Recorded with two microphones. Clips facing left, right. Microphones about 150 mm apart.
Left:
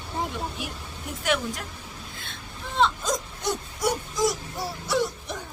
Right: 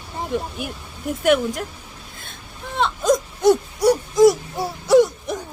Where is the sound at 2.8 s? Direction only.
60° right (ahead or behind).